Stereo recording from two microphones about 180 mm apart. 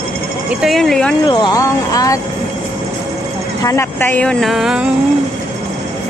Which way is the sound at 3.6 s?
15° left (ahead or behind).